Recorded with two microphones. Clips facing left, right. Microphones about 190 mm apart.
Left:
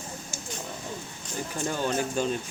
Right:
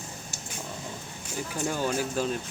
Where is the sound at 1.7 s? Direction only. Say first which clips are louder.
Left 1 dB; 10° right (ahead or behind).